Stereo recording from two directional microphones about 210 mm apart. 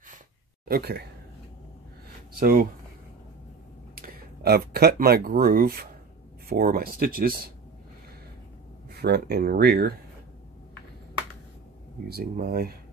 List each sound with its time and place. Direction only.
0.7 s speech: 45° right (ahead or behind)
2.4 s speech: 45° right (ahead or behind)
3.9 s speech: 45° right (ahead or behind)
8.9 s speech: 50° right (ahead or behind)
12.1 s speech: 45° right (ahead or behind)